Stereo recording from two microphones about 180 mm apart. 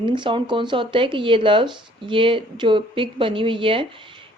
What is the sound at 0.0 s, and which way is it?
Speech, 25° right (ahead or behind).